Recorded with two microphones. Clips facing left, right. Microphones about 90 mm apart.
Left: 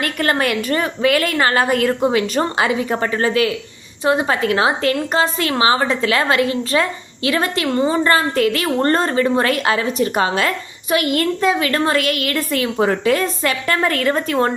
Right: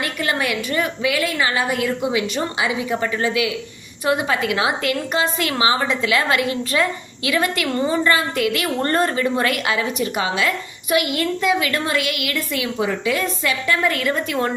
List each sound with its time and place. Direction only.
0.0 s a woman's voice: 50° left (ahead or behind)
4.0 s a woman's voice: 30° left (ahead or behind)
8.0 s a woman's voice: 40° left (ahead or behind)